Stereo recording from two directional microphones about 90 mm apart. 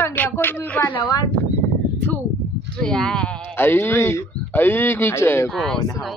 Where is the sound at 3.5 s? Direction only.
25° left (ahead or behind).